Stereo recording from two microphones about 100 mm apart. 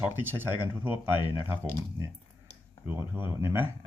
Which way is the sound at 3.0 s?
20° right (ahead or behind).